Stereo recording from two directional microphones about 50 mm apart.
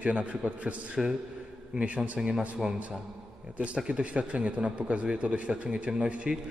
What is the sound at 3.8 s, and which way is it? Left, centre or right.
Speech, right.